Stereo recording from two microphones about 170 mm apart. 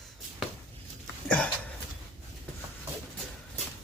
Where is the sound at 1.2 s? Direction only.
10° left (ahead or behind).